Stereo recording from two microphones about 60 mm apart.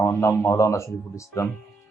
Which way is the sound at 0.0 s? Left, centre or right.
Left.